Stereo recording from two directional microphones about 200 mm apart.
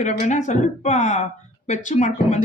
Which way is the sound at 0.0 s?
35° left (ahead or behind).